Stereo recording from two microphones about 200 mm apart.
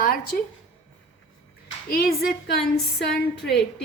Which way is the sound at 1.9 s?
50° left (ahead or behind).